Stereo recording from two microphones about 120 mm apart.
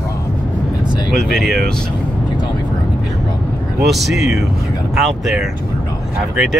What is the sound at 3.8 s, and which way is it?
Speech, centre (ahead or behind).